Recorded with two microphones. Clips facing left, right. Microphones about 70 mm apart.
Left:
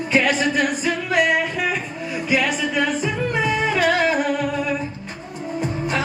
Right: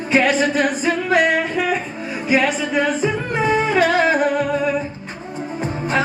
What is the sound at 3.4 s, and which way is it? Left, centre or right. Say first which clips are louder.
Music: right 5 dB; right.